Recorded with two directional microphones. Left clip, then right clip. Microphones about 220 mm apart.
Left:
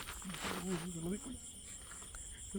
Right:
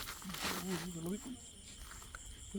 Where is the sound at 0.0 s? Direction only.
40° right (ahead or behind).